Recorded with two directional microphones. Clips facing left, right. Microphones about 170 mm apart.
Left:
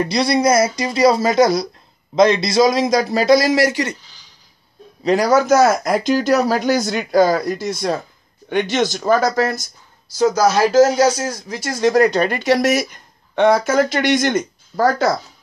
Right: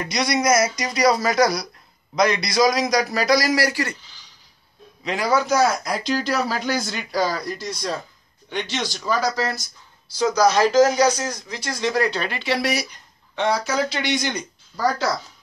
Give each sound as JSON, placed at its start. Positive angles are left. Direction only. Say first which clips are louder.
{"t": 0.0, "sound": "a man's voice", "louder": "left 6 dB", "side_deg": 30}
{"t": 5.0, "sound": "speech", "louder": "left 7 dB", "side_deg": 40}
{"t": 10.6, "sound": "speech", "louder": "left 5 dB", "side_deg": 10}
{"t": 11.4, "sound": "speech", "louder": "left 10 dB", "side_deg": 45}